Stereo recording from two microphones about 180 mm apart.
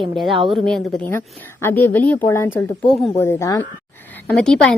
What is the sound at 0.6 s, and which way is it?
A woman's voice, centre (ahead or behind).